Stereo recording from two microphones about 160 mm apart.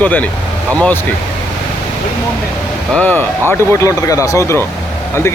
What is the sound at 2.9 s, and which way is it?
Speech, 10° left (ahead or behind).